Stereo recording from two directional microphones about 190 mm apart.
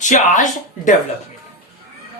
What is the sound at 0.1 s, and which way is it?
Speech, 40° left (ahead or behind).